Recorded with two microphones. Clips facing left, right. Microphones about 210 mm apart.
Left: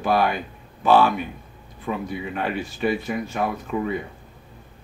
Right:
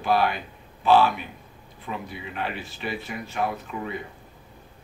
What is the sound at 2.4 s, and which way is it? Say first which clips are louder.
Speech: left 6 dB; 45° left (ahead or behind).